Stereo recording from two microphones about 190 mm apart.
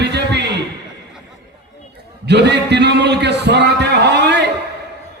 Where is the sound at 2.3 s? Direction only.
65° right (ahead or behind).